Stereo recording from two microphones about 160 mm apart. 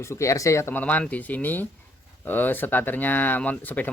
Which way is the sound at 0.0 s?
20° left (ahead or behind).